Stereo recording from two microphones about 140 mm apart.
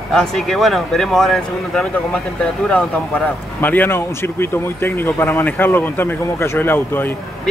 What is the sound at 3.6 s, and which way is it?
Speech, 15° left (ahead or behind).